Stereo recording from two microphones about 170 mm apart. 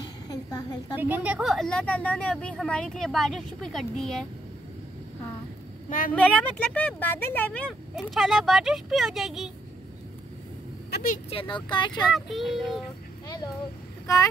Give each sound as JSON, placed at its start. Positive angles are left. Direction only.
{"t": 0.0, "sound": "a sound", "side_deg": 20}
{"t": 0.9, "sound": "speech", "side_deg": -10}
{"t": 5.9, "sound": "a woman's voice", "side_deg": 50}
{"t": 6.1, "sound": "speech", "side_deg": 10}
{"t": 10.9, "sound": "vehicle", "side_deg": 60}
{"t": 11.2, "sound": "speech", "side_deg": 30}
{"t": 12.0, "sound": "speech", "side_deg": 0}
{"t": 14.0, "sound": "speech", "side_deg": 20}